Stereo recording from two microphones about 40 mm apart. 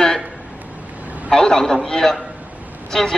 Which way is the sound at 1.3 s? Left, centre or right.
Centre.